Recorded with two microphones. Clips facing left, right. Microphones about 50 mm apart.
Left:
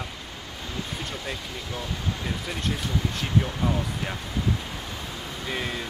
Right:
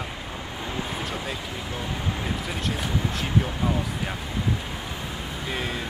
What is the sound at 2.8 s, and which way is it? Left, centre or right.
Speech, centre.